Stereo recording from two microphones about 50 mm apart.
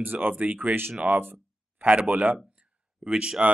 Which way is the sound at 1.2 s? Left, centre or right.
Right.